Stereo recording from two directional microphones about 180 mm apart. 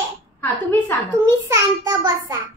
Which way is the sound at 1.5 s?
20° right (ahead or behind).